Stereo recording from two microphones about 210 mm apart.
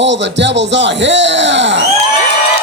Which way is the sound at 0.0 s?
60° right (ahead or behind).